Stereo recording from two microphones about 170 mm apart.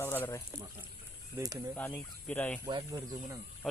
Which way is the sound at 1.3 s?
20° right (ahead or behind).